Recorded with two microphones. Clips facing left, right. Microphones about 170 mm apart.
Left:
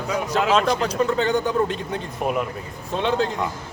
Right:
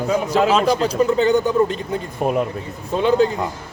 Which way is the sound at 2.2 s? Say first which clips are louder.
Right 4 dB; 30° right (ahead or behind).